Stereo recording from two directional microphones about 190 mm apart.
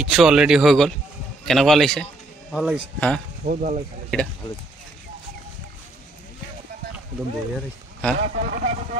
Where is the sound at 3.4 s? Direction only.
45° right (ahead or behind).